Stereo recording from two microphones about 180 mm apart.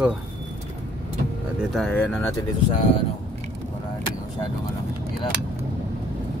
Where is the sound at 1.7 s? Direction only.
5° left (ahead or behind).